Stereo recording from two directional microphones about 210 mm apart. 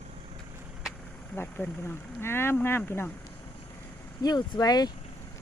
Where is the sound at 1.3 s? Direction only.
10° left (ahead or behind).